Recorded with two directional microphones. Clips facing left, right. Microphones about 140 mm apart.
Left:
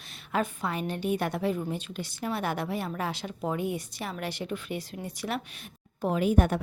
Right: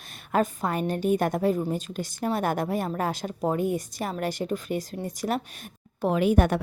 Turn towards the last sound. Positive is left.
turn(degrees=-80)